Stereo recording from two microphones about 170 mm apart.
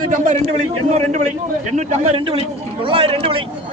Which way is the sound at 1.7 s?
40° right (ahead or behind).